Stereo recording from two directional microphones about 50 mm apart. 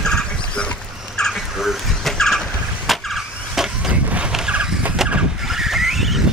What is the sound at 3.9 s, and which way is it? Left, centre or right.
Boat, right.